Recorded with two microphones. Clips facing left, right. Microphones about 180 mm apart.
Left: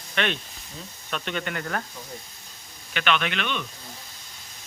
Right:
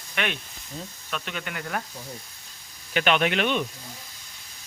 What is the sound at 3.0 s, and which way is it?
Speech, 40° right (ahead or behind).